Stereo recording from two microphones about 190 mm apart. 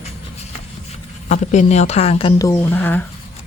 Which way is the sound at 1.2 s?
40° left (ahead or behind).